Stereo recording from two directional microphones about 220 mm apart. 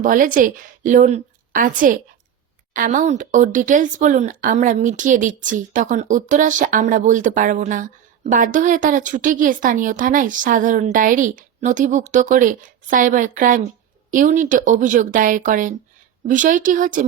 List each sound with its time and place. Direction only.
0.0 s a woman's voice: 40° right (ahead or behind)